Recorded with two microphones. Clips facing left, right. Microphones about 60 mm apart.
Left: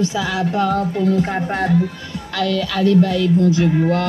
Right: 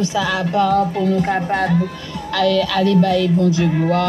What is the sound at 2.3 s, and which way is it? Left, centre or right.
Speech, centre.